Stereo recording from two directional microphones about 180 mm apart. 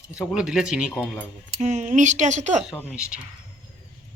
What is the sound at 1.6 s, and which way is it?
Speech, 40° right (ahead or behind).